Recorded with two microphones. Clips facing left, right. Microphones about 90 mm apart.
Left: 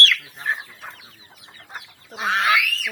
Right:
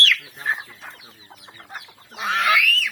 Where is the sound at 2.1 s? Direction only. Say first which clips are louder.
Even; 30° left (ahead or behind).